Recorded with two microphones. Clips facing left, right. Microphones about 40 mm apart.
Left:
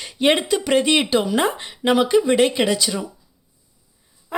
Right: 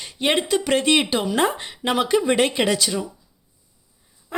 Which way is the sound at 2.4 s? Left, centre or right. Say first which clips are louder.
Left 1 dB; centre.